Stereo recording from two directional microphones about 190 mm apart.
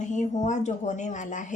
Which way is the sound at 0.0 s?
40° left (ahead or behind).